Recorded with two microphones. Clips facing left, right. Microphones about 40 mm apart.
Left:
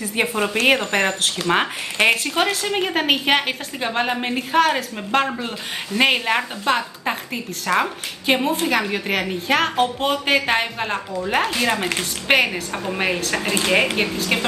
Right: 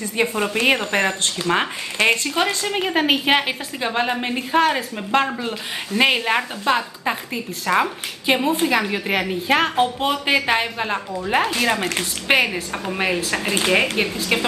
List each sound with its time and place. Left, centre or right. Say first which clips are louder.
0.2 s a woman's voice: right 1 dB; left
0.7 s speech: even; centre